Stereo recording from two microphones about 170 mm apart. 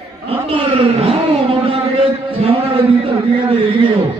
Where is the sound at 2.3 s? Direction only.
35° right (ahead or behind).